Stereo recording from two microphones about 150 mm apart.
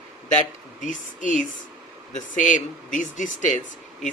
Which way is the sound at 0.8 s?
60° left (ahead or behind).